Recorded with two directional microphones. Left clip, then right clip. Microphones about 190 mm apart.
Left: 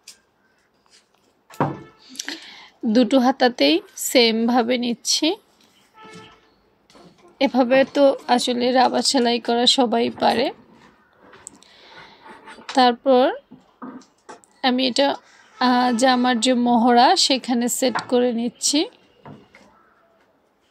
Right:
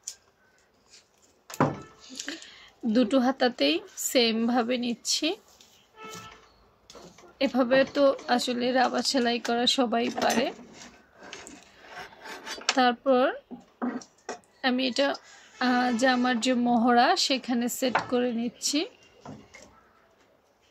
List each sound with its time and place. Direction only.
2.1 s speech: 20° left (ahead or behind)
7.3 s a woman's voice: 20° left (ahead or behind)
12.7 s a woman's voice: 20° left (ahead or behind)
14.6 s a woman's voice: 20° left (ahead or behind)